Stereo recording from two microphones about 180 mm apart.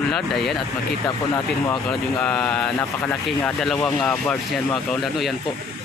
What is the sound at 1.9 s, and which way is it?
Speech, 5° left (ahead or behind).